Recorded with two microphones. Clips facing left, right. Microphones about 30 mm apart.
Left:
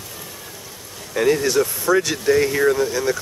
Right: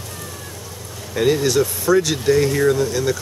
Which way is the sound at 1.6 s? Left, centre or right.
Centre.